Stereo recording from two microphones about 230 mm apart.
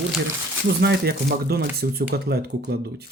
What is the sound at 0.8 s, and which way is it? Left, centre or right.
Speech, right.